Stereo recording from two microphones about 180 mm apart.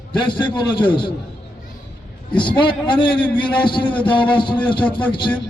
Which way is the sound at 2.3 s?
25° left (ahead or behind).